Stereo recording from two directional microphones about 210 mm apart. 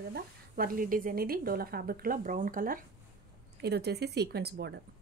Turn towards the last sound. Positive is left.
turn(degrees=-55)  # may be behind; listen again after turning